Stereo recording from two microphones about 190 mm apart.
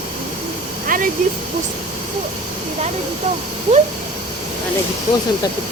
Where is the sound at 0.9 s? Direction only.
45° right (ahead or behind).